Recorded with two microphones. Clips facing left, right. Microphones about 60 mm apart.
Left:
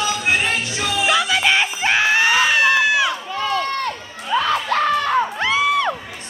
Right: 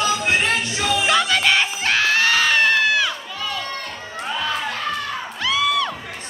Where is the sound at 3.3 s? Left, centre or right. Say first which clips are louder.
Left 7 dB; left.